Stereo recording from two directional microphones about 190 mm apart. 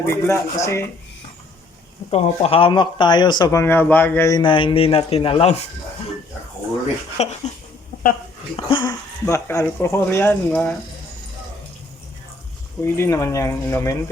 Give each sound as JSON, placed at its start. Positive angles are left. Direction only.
{"t": 0.0, "sound": "speech", "side_deg": 15}
{"t": 2.0, "sound": "speech", "side_deg": 30}
{"t": 7.2, "sound": "speech", "side_deg": 35}
{"t": 8.5, "sound": "speech", "side_deg": 25}
{"t": 12.8, "sound": "speech", "side_deg": 15}